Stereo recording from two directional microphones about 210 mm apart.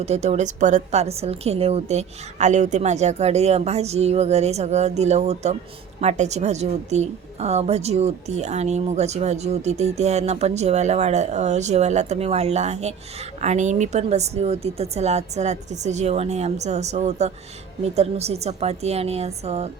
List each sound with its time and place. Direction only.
0.0 s a woman's voice: 30° right (ahead or behind)